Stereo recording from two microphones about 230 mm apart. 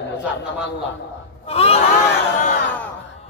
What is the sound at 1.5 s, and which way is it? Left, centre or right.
Crowd, left.